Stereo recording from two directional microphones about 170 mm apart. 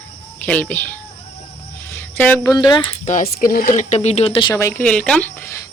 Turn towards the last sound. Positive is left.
turn(degrees=15)  # may be behind; listen again after turning